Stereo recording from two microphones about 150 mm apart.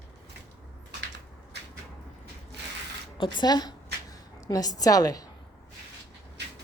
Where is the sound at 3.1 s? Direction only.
30° left (ahead or behind).